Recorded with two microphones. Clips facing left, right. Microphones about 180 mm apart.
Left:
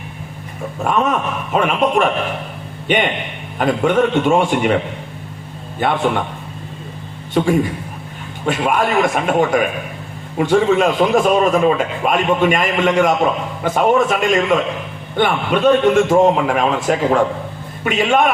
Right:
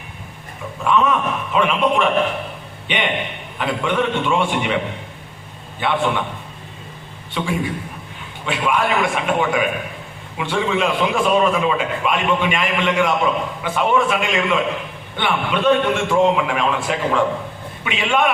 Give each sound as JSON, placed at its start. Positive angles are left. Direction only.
{"t": 0.8, "sound": "a man's voice", "side_deg": 45}
{"t": 5.8, "sound": "a man's voice", "side_deg": 45}
{"t": 7.3, "sound": "a man's voice", "side_deg": 45}